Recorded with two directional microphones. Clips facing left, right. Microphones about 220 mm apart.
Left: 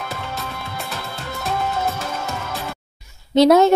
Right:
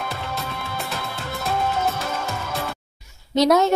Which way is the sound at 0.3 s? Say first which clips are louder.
Even; centre (ahead or behind).